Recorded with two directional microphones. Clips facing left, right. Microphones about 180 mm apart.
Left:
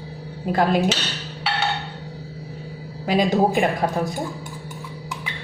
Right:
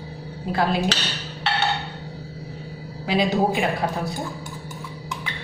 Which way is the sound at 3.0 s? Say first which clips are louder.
Left 2 dB; 45° left (ahead or behind).